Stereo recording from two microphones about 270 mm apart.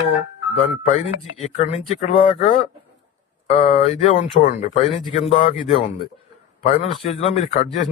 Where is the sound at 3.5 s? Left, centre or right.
Left.